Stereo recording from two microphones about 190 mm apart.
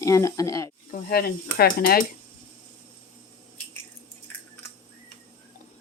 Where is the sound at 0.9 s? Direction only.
55° left (ahead or behind).